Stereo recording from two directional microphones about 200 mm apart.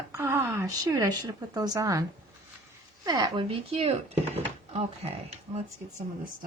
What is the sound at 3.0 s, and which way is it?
Speech, 25° right (ahead or behind).